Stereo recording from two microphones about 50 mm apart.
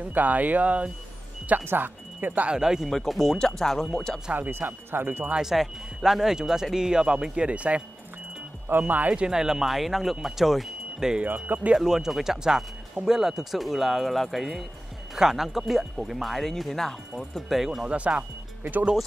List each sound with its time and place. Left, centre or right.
0.1 s speech: right
1.6 s speech: right
2.1 s speech: right
2.5 s speech: centre
3.0 s speech: centre
4.5 s speech: right
5.4 s speech: centre; by 7.8 s right
8.6 s speech: right
9.1 s speech: centre
11.2 s speech: right
11.7 s speech: centre
17.8 s speech: right